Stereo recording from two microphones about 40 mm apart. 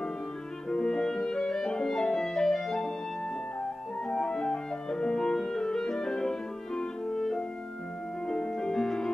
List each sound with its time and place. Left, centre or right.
0.7 s clarinet: centre
4.1 s music: centre